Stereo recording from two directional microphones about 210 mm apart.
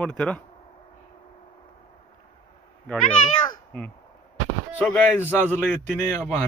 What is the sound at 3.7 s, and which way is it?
Speech, 5° left (ahead or behind).